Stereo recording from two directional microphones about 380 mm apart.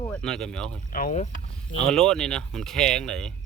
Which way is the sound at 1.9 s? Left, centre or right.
Centre.